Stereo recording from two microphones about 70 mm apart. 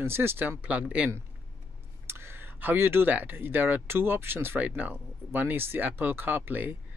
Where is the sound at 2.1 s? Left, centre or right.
Right.